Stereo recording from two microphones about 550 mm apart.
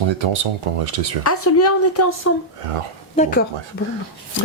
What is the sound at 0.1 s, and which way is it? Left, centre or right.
Speech, right.